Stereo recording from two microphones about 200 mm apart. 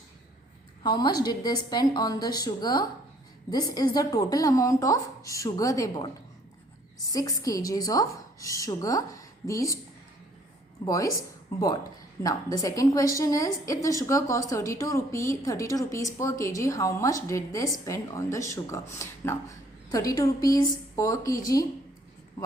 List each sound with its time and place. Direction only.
0.8 s a woman's voice: 20° left (ahead or behind)
7.1 s a woman's voice: 15° left (ahead or behind)
10.8 s a woman's voice: 15° left (ahead or behind)